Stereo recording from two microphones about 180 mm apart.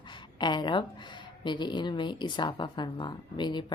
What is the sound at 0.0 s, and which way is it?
Speech, 25° left (ahead or behind).